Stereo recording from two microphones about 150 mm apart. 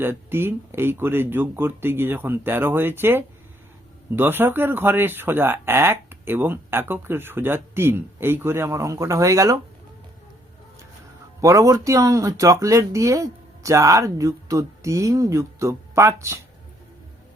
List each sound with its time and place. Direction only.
0.0 s speech: 15° right (ahead or behind)
11.3 s speech: 20° right (ahead or behind)